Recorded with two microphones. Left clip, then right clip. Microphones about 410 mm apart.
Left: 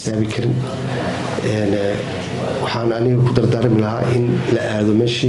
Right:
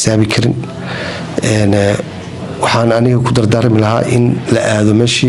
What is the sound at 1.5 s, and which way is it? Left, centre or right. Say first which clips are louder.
A man's voice: right 7 dB; right.